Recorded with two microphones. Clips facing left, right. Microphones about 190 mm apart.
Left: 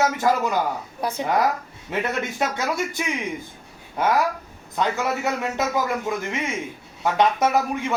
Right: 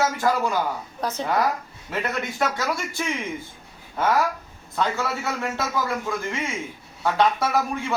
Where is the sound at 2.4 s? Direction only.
20° left (ahead or behind).